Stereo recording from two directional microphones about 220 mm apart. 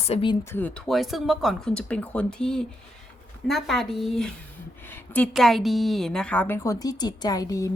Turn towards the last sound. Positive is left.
turn(degrees=15)  # may be behind; listen again after turning